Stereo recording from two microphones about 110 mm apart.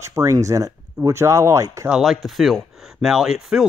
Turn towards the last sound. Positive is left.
turn(degrees=-5)  # may be behind; listen again after turning